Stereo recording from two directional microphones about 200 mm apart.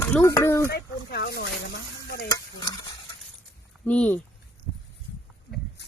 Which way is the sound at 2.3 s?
20° left (ahead or behind).